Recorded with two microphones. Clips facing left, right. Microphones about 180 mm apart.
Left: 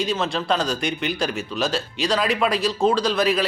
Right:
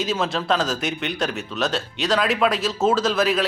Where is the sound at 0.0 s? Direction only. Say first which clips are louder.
Even; centre (ahead or behind).